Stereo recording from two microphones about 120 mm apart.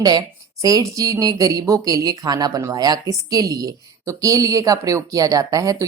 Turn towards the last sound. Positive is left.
turn(degrees=-30)  # may be behind; listen again after turning